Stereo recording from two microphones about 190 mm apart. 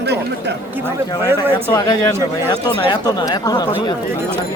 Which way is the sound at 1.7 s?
20° left (ahead or behind).